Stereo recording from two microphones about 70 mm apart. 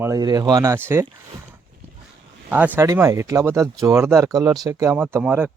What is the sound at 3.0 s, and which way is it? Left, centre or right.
Speech, right.